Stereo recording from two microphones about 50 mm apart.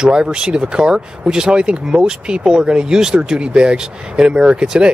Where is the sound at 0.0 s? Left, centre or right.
Centre.